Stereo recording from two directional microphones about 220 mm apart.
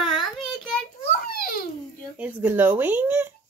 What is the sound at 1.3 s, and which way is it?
Babbling, 40° left (ahead or behind).